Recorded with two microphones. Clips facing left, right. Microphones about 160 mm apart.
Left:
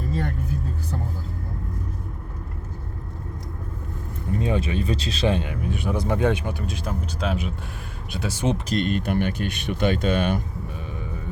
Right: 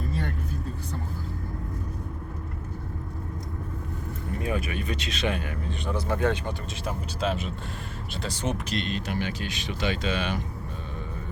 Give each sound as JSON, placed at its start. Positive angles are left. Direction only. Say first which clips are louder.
{"t": 4.4, "sound": "speech", "louder": "left 5 dB", "side_deg": 25}
{"t": 8.2, "sound": "speech", "louder": "left 6 dB", "side_deg": 10}
{"t": 8.7, "sound": "speech", "louder": "left 7 dB", "side_deg": 50}